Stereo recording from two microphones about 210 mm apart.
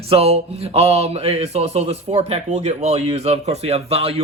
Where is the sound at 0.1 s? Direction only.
30° right (ahead or behind).